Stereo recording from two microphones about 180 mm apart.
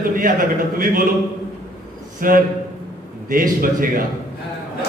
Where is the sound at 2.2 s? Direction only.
50° right (ahead or behind).